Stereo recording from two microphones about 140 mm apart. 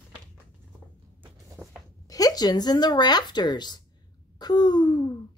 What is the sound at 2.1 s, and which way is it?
Speech, 25° left (ahead or behind).